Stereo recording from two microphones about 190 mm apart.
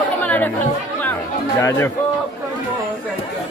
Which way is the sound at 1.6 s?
15° left (ahead or behind).